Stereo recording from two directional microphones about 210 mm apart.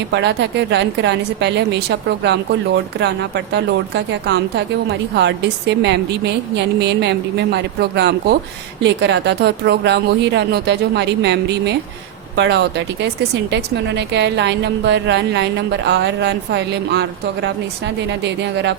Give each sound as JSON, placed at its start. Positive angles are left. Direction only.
{"t": 0.1, "sound": "a woman's voice", "side_deg": -55}